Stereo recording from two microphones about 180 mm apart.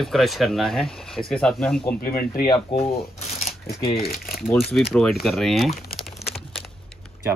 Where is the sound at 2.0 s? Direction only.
55° left (ahead or behind).